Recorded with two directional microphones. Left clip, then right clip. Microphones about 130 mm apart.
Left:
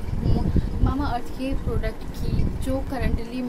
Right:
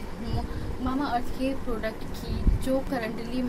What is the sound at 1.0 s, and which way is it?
Speech, 10° left (ahead or behind).